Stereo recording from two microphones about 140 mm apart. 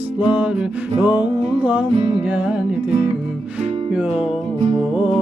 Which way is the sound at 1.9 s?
45° right (ahead or behind).